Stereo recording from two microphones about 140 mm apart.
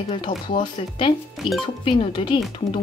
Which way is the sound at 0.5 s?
40° left (ahead or behind).